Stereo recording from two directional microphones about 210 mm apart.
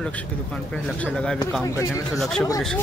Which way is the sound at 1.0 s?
Centre (ahead or behind).